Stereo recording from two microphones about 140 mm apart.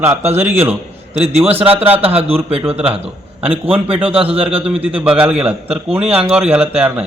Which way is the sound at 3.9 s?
10° right (ahead or behind).